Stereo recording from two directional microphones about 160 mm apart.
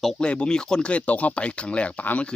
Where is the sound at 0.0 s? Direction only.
5° left (ahead or behind).